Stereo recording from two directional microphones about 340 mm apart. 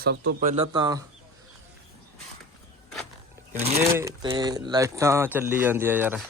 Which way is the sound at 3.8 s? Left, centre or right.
Centre.